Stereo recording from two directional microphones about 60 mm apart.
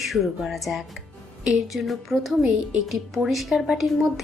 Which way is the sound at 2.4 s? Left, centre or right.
Right.